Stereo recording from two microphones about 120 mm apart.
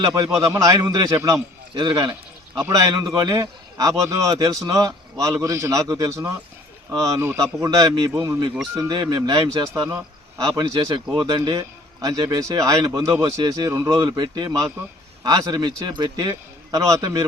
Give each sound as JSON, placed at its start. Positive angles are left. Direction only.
{"t": 0.0, "sound": "a man's voice", "side_deg": -30}
{"t": 2.6, "sound": "a man's voice", "side_deg": -25}
{"t": 16.3, "sound": "a man's voice", "side_deg": -25}